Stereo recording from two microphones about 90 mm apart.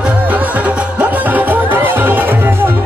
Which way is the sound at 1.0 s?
20° right (ahead or behind).